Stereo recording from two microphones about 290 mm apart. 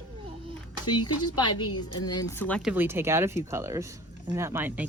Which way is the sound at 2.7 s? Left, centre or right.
Centre.